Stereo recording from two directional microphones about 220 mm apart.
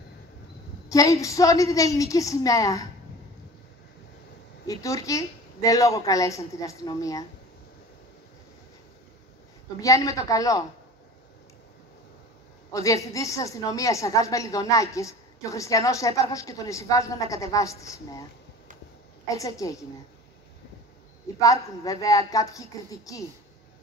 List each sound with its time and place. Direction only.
0.8 s a woman's voice: 15° left (ahead or behind)
4.6 s a woman's voice: 15° left (ahead or behind)
9.8 s a woman's voice: 15° left (ahead or behind)
12.7 s a woman's voice: 15° left (ahead or behind)
19.2 s a woman's voice: 15° left (ahead or behind)
21.4 s a woman's voice: 15° left (ahead or behind)